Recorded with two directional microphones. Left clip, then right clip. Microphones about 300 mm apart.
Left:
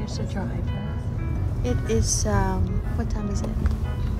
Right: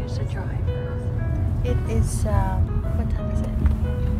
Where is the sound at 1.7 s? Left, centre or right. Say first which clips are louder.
Left 3 dB; left.